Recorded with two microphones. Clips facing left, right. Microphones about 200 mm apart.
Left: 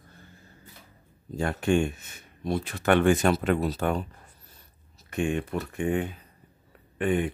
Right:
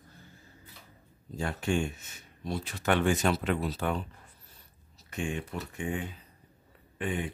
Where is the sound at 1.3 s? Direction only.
55° left (ahead or behind).